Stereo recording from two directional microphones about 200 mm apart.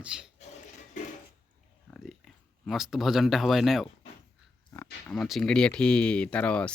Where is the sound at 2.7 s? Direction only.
Centre (ahead or behind).